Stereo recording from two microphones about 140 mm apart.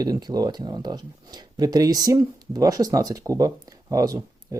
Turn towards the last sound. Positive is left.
turn(degrees=-25)  # may be behind; listen again after turning